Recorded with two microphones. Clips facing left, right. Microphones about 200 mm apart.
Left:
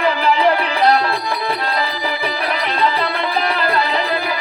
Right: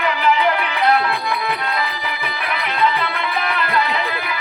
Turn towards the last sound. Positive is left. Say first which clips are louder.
# left 4 dB
turn(degrees=35)  # may be behind; listen again after turning